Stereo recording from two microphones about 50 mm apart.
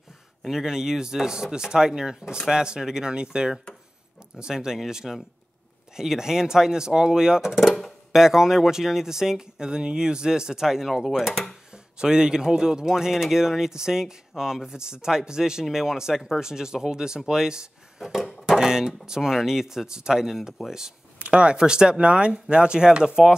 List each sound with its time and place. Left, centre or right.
0.4 s a man's voice: centre
7.7 s music: centre
8.2 s a man's voice: centre
21.2 s speech: right